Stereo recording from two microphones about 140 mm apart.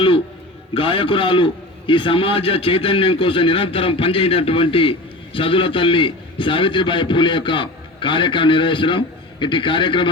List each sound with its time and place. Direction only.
0.7 s a man's voice: 40° left (ahead or behind)